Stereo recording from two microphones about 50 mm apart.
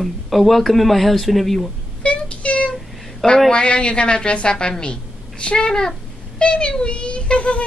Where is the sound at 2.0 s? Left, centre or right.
Left.